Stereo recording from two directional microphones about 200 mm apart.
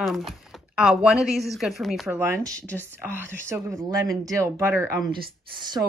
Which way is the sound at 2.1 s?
10° right (ahead or behind).